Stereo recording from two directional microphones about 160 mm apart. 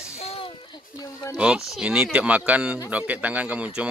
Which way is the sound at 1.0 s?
20° left (ahead or behind).